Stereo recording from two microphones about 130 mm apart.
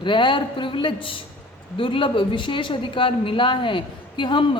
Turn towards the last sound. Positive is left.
turn(degrees=40)  # may be behind; listen again after turning